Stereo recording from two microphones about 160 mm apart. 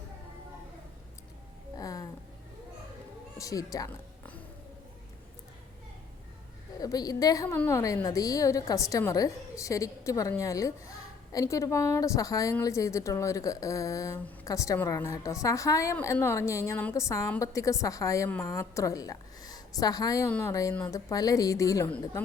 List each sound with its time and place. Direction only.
1.7 s a sound: 20° left (ahead or behind)
3.3 s speech: 20° left (ahead or behind)
6.7 s a woman's voice: 25° left (ahead or behind)